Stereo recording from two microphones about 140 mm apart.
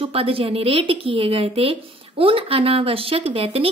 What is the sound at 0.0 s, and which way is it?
A woman's voice, 40° right (ahead or behind).